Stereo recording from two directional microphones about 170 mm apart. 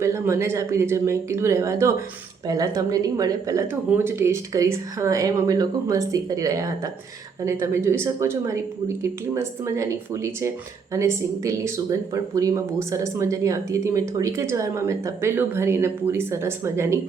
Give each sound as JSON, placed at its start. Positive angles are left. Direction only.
{"t": 0.0, "sound": "speech", "side_deg": -15}